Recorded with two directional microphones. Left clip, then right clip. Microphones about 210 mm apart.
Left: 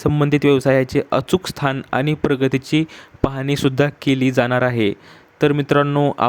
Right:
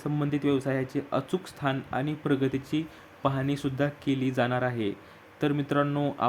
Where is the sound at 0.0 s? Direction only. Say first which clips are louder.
Left 13 dB; 40° left (ahead or behind).